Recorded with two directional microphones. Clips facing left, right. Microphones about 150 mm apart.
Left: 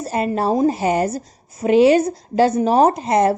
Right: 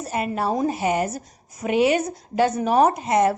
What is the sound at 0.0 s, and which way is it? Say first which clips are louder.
A woman's voice: left 5 dB; 35° left (ahead or behind).